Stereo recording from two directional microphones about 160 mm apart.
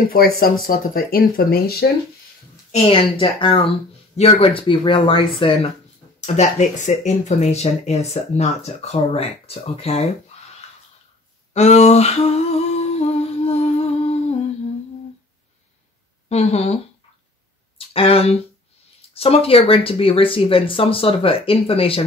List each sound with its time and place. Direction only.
0.1 s speech: 65° left (ahead or behind)
2.7 s speech: 35° left (ahead or behind)
11.5 s humming: 45° left (ahead or behind)
16.3 s speech: 40° left (ahead or behind)
17.7 s a sound: 35° left (ahead or behind)
18.9 s speech: 35° left (ahead or behind)